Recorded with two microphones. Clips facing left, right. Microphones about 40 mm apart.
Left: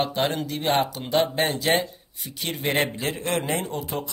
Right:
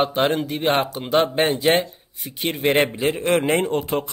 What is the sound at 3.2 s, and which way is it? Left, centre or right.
Speech, right.